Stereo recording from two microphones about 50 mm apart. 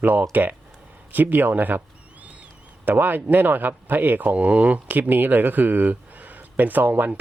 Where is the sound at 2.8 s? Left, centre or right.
Right.